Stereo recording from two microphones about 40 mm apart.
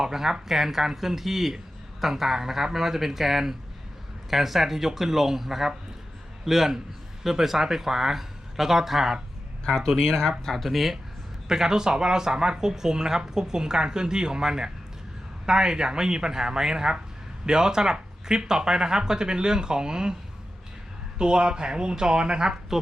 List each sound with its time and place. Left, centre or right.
0.0 s a man's voice: centre
9.6 s speech: centre
11.4 s speech: centre
21.2 s speech: right